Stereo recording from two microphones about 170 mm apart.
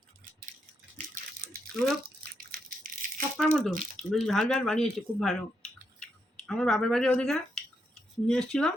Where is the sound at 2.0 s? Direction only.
60° right (ahead or behind).